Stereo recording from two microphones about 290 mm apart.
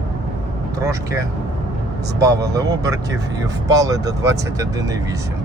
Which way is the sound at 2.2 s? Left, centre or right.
Centre.